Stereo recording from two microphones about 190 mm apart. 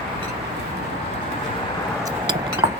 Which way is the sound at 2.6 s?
20° right (ahead or behind).